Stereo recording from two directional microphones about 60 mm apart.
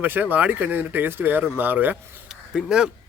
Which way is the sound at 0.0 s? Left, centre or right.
Right.